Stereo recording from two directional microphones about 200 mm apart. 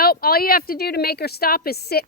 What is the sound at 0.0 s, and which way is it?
A woman's voice, 50° left (ahead or behind).